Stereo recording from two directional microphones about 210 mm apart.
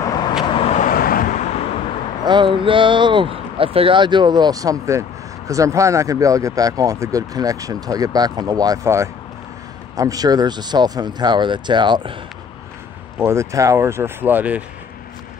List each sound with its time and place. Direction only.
0.0 s vehicle: 20° left (ahead or behind)
2.2 s speech: 20° right (ahead or behind)
13.2 s speech: 15° right (ahead or behind)